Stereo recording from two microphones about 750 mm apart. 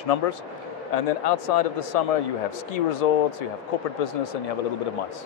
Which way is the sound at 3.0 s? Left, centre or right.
Left.